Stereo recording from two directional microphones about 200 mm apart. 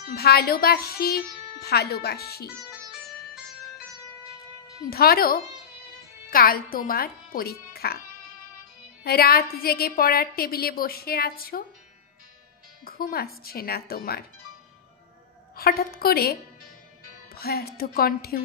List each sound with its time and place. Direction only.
0.0 s a woman's voice: 50° left (ahead or behind)
4.8 s a woman's voice: 50° left (ahead or behind)
7.7 s music: 50° left (ahead or behind)
9.0 s a woman's voice: 50° left (ahead or behind)
12.8 s a woman's voice: 50° left (ahead or behind)
15.5 s a woman's voice: 50° left (ahead or behind)